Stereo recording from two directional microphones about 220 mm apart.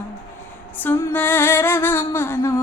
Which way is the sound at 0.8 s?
10° left (ahead or behind).